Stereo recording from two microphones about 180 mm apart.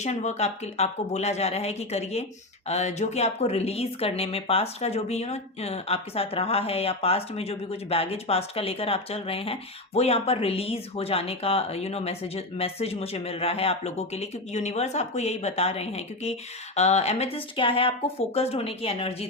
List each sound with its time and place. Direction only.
0.0 s speech: 40° left (ahead or behind)